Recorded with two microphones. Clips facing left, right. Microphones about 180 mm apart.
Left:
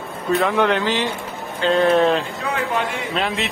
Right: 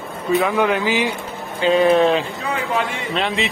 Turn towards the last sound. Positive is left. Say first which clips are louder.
# right 1 dB
turn(degrees=0)  # may be behind; listen again after turning